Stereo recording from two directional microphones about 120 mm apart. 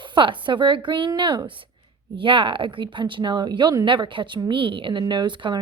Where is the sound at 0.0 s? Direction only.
45° right (ahead or behind).